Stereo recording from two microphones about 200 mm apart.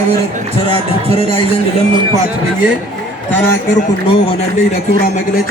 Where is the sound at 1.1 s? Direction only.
30° right (ahead or behind).